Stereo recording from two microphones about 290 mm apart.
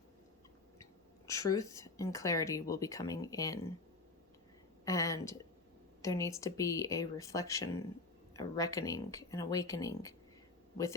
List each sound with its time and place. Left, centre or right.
1.3 s speech: centre
4.9 s a sound: centre
6.0 s speech: centre